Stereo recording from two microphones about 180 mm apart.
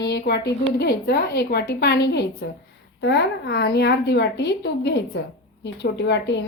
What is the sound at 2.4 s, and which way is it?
A woman's voice, 75° left (ahead or behind).